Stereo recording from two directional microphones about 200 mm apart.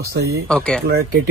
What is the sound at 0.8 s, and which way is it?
Speech, 50° right (ahead or behind).